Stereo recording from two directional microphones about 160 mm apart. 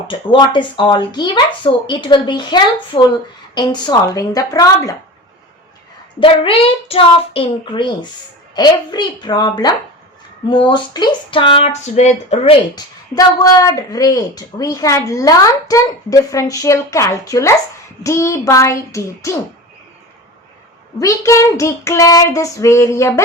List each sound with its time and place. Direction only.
0.1 s a woman's voice: 30° left (ahead or behind)
6.1 s a woman's voice: 35° left (ahead or behind)
12.7 s a woman's voice: 25° left (ahead or behind)
21.0 s a woman's voice: 20° left (ahead or behind)